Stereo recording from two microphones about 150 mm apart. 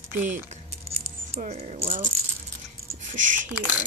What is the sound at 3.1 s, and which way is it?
Speech, 60° right (ahead or behind).